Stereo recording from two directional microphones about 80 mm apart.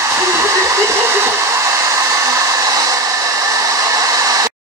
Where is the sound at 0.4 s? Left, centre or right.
Right.